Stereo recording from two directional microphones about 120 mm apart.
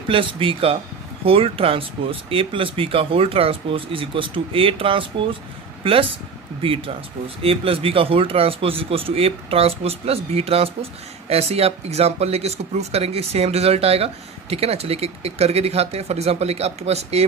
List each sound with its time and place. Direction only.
0.1 s a man's voice: 45° right (ahead or behind); by 17.3 s 60° right (ahead or behind)